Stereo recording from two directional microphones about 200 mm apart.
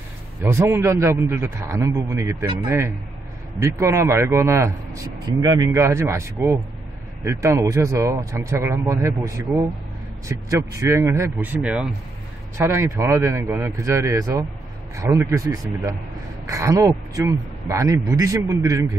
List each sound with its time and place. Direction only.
0.4 s speech: 15° right (ahead or behind)
3.5 s speech: 15° right (ahead or behind)